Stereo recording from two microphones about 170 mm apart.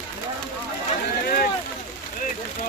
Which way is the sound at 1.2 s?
55° left (ahead or behind).